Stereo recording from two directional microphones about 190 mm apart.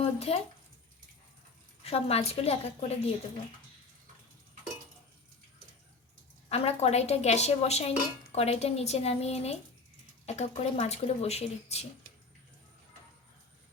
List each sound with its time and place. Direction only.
0.0 s speech: 35° left (ahead or behind)
1.8 s speech: 30° left (ahead or behind)
6.5 s speech: 35° left (ahead or behind)